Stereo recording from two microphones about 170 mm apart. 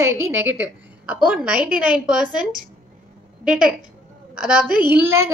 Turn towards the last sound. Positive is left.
turn(degrees=-15)  # may be behind; listen again after turning